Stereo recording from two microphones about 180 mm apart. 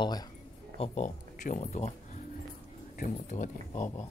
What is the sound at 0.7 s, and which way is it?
Speech, 35° left (ahead or behind).